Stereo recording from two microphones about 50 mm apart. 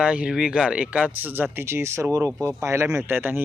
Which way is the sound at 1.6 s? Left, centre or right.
Right.